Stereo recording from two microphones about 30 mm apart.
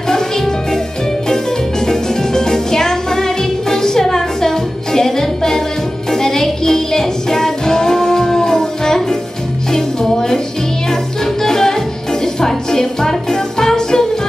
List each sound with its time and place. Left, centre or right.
0.1 s music: centre
1.9 s music: centre
11.4 s music: centre